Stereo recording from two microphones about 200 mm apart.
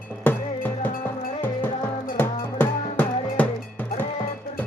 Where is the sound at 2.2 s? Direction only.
10° left (ahead or behind).